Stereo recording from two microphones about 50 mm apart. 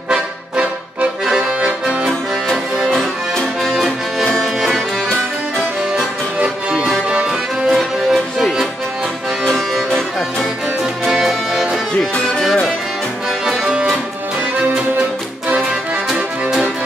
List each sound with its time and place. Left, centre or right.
1.2 s accordion: centre
3.6 s music: centre
6.4 s music: centre
7.7 s music: centre
10.8 s music: centre
13.5 s music: centre
15.0 s music: right
16.1 s music: centre